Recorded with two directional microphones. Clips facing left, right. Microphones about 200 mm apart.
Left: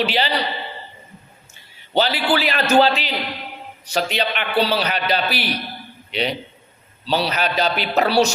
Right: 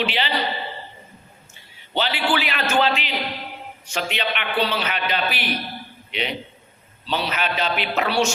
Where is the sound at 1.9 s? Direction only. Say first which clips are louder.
Left 4 dB; 40° left (ahead or behind).